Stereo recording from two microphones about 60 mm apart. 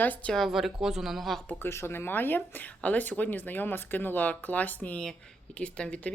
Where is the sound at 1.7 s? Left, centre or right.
Left.